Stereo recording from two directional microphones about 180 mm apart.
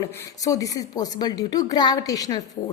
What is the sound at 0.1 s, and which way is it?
A woman's voice, 15° left (ahead or behind).